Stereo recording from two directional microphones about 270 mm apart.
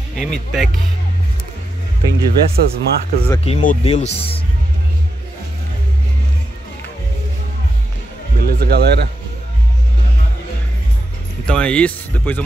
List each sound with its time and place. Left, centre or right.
0.1 s speech: centre
2.0 s speech: centre
3.4 s speech: left
8.4 s speech: right
11.4 s speech: centre